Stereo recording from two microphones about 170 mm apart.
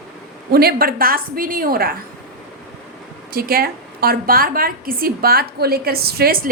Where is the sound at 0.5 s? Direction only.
65° right (ahead or behind).